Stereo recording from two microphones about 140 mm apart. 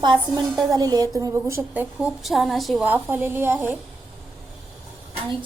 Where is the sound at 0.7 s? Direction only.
30° right (ahead or behind); by 2.8 s centre (ahead or behind).